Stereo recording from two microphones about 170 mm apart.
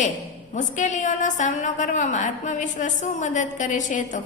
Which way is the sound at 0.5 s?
45° left (ahead or behind).